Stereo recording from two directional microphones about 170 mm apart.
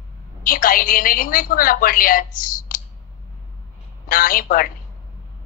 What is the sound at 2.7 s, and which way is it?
Clicking, 55° left (ahead or behind).